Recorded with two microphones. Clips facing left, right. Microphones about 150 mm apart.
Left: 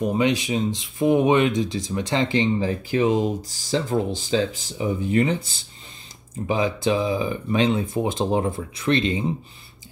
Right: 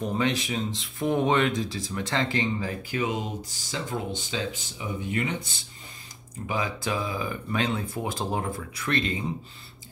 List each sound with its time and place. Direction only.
0.0 s speech: 15° left (ahead or behind)